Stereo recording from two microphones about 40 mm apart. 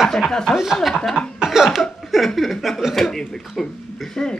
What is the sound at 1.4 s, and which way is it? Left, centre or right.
Cough, centre.